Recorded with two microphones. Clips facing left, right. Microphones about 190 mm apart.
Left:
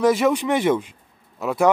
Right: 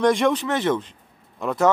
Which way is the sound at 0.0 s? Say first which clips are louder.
Left 1 dB; 5° left (ahead or behind).